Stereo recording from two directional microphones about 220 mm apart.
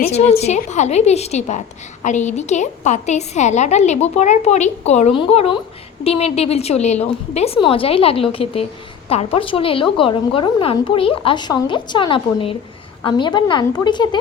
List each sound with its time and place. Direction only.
0.4 s a woman's voice: 30° left (ahead or behind)